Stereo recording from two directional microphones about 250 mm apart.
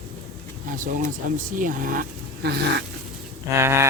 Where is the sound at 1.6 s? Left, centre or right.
Right.